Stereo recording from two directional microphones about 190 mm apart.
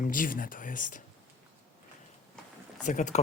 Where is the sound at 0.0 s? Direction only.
45° left (ahead or behind).